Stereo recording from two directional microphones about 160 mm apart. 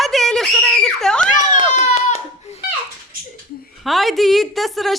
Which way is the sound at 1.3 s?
50° left (ahead or behind).